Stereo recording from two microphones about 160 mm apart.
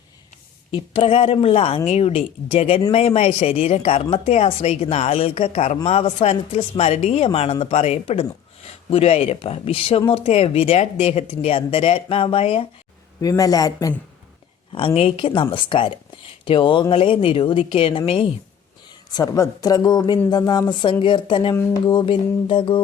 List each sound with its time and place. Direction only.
0.7 s speech: 35° left (ahead or behind)
13.2 s speech: 20° left (ahead or behind)
14.7 s speech: 35° left (ahead or behind)
19.1 s speech: 20° left (ahead or behind)
21.5 s speech: 15° left (ahead or behind)
21.8 s speech: 30° left (ahead or behind)